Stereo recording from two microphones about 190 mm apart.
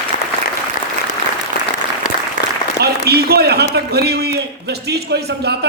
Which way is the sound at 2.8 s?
55° right (ahead or behind).